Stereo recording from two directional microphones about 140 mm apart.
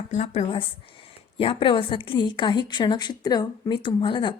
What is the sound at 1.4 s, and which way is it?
A woman's voice, 40° left (ahead or behind).